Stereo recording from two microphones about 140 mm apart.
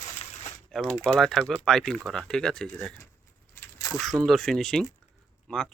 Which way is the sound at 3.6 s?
25° left (ahead or behind).